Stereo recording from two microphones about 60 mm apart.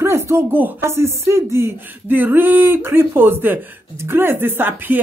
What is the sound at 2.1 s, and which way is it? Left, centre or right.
A woman's voice, right.